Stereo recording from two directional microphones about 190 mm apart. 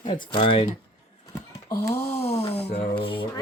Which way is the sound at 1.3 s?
15° left (ahead or behind).